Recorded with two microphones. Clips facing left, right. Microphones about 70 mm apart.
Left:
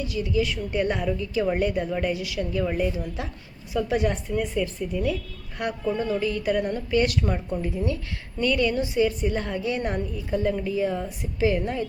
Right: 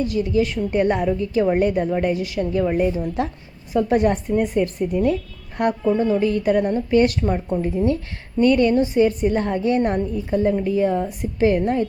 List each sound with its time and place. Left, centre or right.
0.0 s a woman's voice: right
6.0 s a woman's voice: right